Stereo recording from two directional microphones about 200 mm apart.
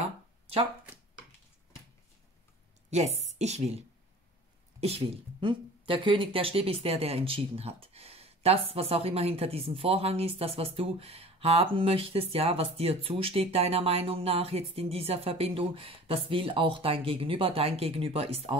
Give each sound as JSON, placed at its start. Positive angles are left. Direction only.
{"t": 2.9, "sound": "a woman's voice", "side_deg": -35}
{"t": 4.7, "sound": "a woman's voice", "side_deg": -30}